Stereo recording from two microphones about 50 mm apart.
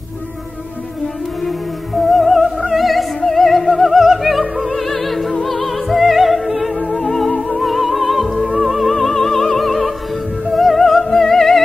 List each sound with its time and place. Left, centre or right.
2.0 s music: centre
2.7 s opera: centre
5.4 s music: centre
7.2 s music: centre
7.5 s music: centre